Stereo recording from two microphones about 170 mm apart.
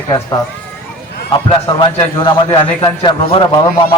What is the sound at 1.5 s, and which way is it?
A man's voice, 30° left (ahead or behind).